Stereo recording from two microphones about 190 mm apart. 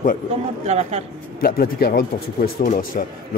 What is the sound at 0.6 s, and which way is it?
Speech, 35° right (ahead or behind).